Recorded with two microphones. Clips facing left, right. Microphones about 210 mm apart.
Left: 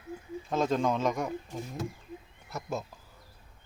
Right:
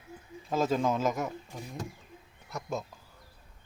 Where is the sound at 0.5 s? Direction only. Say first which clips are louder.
Even; 5° right (ahead or behind).